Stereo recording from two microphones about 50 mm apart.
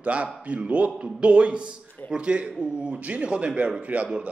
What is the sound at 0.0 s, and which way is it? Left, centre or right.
Speech, right.